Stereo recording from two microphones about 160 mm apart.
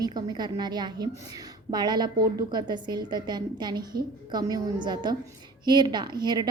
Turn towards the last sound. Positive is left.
turn(degrees=-25)  # may be behind; listen again after turning